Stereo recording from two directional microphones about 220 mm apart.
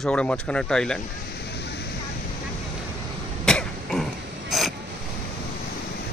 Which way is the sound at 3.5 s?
5° left (ahead or behind).